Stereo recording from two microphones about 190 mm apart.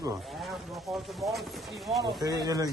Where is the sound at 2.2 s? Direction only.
20° right (ahead or behind).